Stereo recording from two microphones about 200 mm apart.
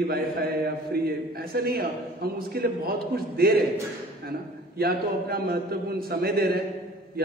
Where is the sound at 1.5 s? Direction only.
50° right (ahead or behind).